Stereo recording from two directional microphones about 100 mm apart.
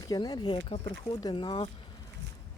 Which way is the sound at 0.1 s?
45° left (ahead or behind).